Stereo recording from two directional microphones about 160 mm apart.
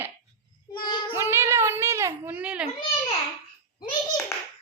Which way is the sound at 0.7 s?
30° left (ahead or behind).